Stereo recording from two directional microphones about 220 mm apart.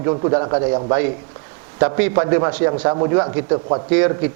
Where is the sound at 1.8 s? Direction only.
15° right (ahead or behind).